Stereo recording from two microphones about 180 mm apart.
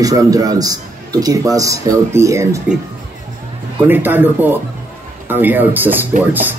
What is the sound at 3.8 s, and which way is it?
A man's voice, 10° right (ahead or behind).